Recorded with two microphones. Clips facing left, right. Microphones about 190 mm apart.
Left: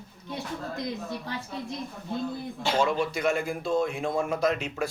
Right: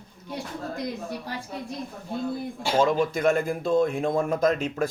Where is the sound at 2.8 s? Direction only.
45° right (ahead or behind).